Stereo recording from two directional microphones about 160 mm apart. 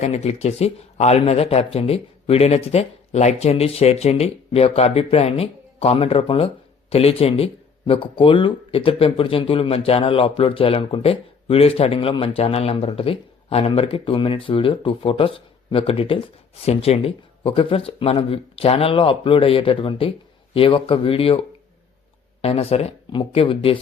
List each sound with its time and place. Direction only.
0.0 s speech: 40° left (ahead or behind)